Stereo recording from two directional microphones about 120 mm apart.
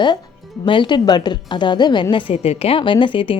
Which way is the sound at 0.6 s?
45° left (ahead or behind).